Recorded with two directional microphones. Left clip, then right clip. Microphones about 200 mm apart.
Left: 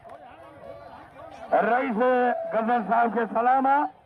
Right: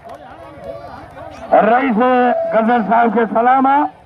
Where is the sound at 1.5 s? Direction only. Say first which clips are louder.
Right 11 dB; 45° left (ahead or behind).